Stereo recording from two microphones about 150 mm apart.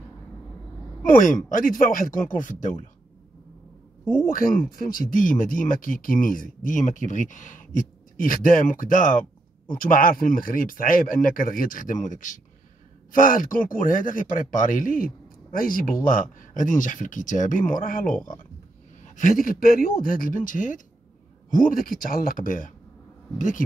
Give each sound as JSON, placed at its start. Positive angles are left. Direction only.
{"t": 1.0, "sound": "speech", "side_deg": 65}
{"t": 4.0, "sound": "speech", "side_deg": 0}
{"t": 4.3, "sound": "speech", "side_deg": 70}
{"t": 19.1, "sound": "speech", "side_deg": 65}